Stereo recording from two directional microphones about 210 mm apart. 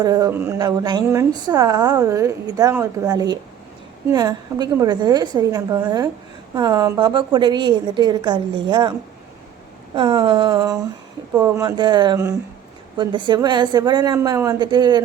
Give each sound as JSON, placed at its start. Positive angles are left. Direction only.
{"t": 0.0, "sound": "a woman's voice", "side_deg": -15}